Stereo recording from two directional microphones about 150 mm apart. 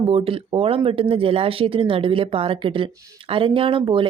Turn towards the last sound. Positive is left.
turn(degrees=-35)  # may be behind; listen again after turning